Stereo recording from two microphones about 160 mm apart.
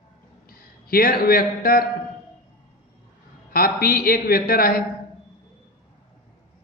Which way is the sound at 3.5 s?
70° left (ahead or behind).